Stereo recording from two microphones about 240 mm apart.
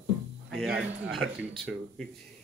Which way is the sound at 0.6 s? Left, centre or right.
Centre.